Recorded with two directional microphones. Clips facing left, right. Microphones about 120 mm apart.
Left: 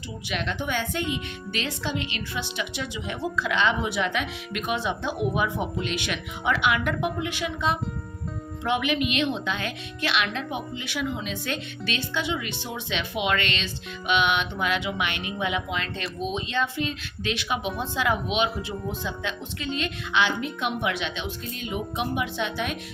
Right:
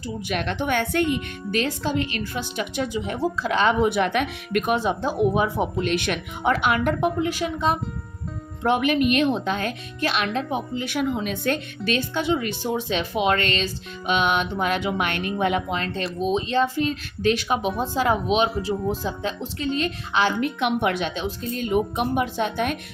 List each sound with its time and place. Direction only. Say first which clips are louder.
0.3 s speech: right 4 dB; 50° right (ahead or behind)
3.8 s speech: right 6 dB; 55° right (ahead or behind); by 5.6 s 35° right (ahead or behind)
5.8 s speech: right 6 dB; 50° right (ahead or behind)
20.4 s a woman's voice: right 5 dB; 65° right (ahead or behind)
20.9 s speech: right 5 dB; 40° right (ahead or behind)